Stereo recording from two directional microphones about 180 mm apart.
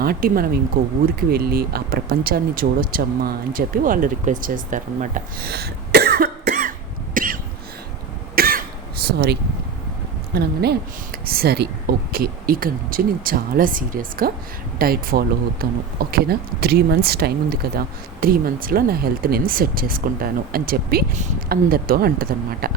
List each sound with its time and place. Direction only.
0.0 s speech: 55° right (ahead or behind)
8.4 s cough: 55° right (ahead or behind)
9.1 s speech: 65° right (ahead or behind)